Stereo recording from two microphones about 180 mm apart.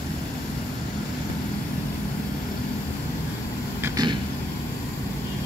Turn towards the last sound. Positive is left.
turn(degrees=-20)  # may be behind; listen again after turning